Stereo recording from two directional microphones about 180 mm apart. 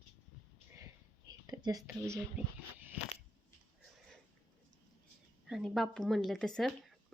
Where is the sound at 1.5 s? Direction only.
20° right (ahead or behind).